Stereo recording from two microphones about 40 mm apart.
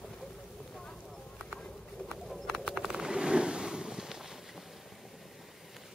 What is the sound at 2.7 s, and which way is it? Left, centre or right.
Vehicle, centre.